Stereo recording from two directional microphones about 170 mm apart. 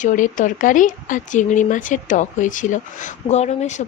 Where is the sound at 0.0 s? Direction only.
50° left (ahead or behind).